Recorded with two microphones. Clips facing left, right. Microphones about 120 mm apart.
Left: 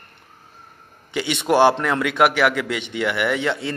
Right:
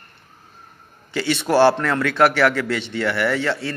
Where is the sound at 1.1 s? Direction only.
15° left (ahead or behind).